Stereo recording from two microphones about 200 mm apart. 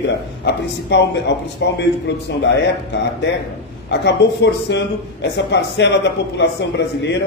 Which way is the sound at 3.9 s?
60° left (ahead or behind).